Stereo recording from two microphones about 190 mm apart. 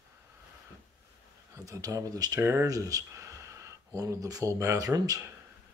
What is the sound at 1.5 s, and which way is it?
Speech, 15° right (ahead or behind).